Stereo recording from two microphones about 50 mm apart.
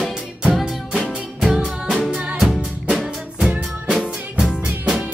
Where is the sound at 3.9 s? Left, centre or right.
Centre.